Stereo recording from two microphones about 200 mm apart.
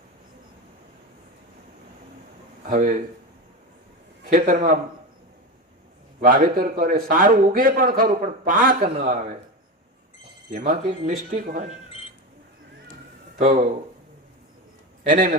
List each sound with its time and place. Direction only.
2.6 s a man's voice: 45° right (ahead or behind)
4.3 s a man's voice: 45° right (ahead or behind)
6.1 s a man's voice: 45° right (ahead or behind)
10.5 s a man's voice: 45° right (ahead or behind)
13.4 s speech: 40° right (ahead or behind)
15.1 s a man's voice: 45° right (ahead or behind)